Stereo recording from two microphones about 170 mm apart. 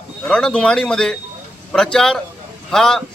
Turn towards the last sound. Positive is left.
turn(degrees=5)  # may be behind; listen again after turning